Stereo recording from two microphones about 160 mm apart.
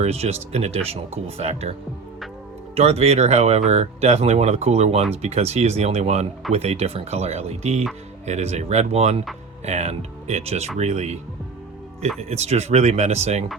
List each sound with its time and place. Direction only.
0.0 s speech: 40° right (ahead or behind)
2.7 s speech: 40° right (ahead or behind)
12.3 s speech: 40° right (ahead or behind)